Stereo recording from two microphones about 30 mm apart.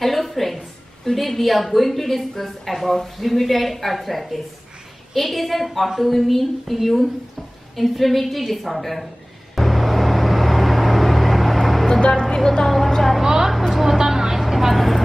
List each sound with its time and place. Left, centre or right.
0.0 s a sound: centre
1.0 s a woman's voice: centre
9.6 s vehicle: centre
12.1 s a sound: left
12.6 s vehicle: centre
13.2 s a sound: centre
13.5 s vehicle: centre
13.9 s vehicle: centre
14.4 s vehicle: centre